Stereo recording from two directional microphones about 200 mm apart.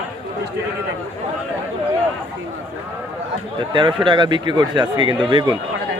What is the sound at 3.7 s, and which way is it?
Speech, 25° right (ahead or behind).